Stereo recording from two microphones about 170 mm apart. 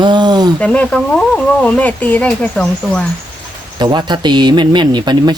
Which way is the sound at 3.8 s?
25° right (ahead or behind).